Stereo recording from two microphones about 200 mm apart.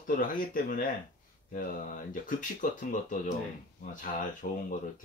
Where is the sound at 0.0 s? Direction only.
45° left (ahead or behind).